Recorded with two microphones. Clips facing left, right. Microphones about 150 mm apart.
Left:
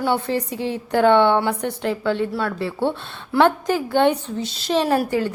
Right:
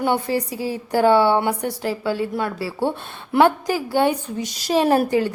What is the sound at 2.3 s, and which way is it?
A woman's voice, 20° right (ahead or behind).